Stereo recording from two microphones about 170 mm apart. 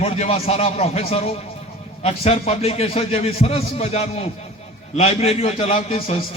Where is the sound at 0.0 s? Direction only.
35° left (ahead or behind).